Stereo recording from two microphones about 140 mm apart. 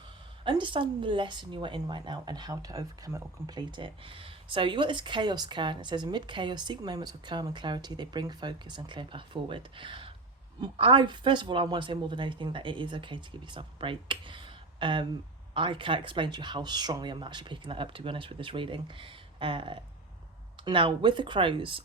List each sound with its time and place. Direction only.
0.4 s speech: 35° right (ahead or behind)